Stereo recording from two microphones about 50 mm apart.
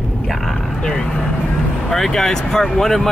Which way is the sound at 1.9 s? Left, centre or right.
Centre.